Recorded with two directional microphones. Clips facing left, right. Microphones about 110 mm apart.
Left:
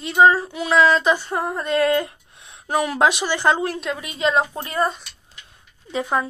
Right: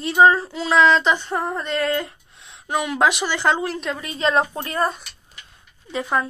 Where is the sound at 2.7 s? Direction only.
30° left (ahead or behind).